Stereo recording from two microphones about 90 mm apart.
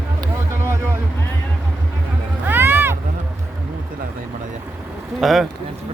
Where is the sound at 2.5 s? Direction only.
25° right (ahead or behind).